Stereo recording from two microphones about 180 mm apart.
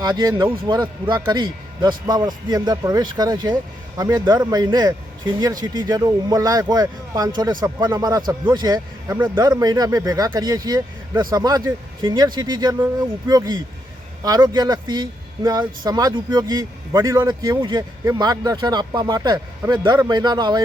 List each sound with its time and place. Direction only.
0.0 s a man's voice: 25° right (ahead or behind)